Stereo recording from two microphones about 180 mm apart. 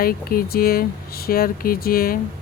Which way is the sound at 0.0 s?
55° left (ahead or behind).